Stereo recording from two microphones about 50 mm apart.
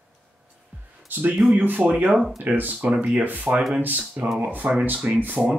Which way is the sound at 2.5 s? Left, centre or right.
Right.